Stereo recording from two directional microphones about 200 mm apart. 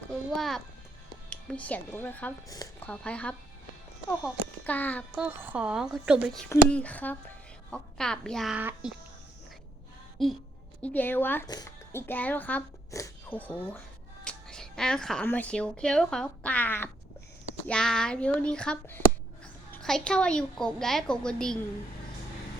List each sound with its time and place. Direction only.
0.3 s a woman's voice: centre (ahead or behind); by 2.9 s 20° left (ahead or behind)
2.9 s speech: 5° left (ahead or behind)
5.2 s a woman's voice: 10° right (ahead or behind)
10.2 s a woman's voice: centre (ahead or behind)